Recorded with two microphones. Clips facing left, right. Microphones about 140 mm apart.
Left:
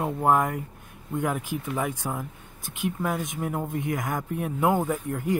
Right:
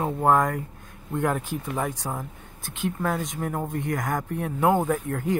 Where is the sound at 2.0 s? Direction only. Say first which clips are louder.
Even; 15° right (ahead or behind).